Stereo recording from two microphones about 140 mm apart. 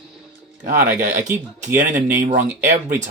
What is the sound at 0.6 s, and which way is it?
Speech, 75° right (ahead or behind).